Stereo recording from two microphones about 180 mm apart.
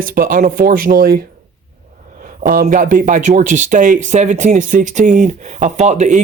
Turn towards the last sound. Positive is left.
turn(degrees=-40)  # may be behind; listen again after turning